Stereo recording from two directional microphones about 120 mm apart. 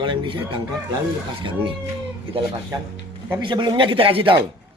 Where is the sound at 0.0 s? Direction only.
45° right (ahead or behind).